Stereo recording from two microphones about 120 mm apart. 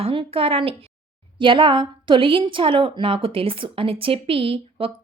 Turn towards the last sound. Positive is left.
turn(degrees=-50)  # may be behind; listen again after turning